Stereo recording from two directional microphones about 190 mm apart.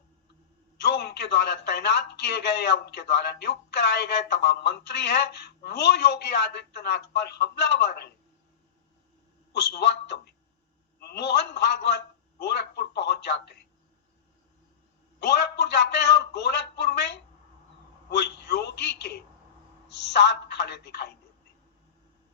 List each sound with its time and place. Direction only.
0.8 s a man's voice: 60° left (ahead or behind)
9.5 s a man's voice: 60° left (ahead or behind)
15.2 s a man's voice: 60° left (ahead or behind)
18.1 s a man's voice: 60° left (ahead or behind)